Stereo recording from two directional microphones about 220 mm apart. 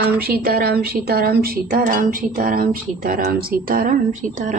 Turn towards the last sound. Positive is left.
turn(degrees=-40)  # may be behind; listen again after turning